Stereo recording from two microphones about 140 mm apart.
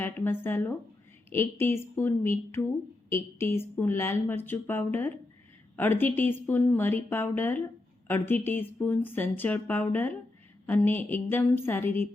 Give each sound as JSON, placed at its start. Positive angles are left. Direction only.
{"t": 0.0, "sound": "speech", "side_deg": 15}